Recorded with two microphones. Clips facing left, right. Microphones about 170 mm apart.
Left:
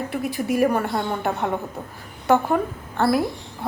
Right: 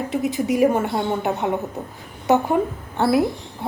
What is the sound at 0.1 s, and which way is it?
A woman's voice, 20° right (ahead or behind).